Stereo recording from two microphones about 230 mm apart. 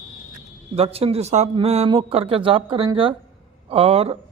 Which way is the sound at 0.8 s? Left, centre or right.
Right.